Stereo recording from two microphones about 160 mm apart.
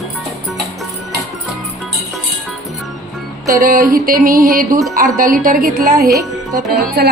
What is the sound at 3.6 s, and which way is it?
A woman's voice, 60° right (ahead or behind).